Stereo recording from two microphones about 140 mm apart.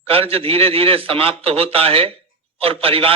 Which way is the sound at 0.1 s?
45° right (ahead or behind).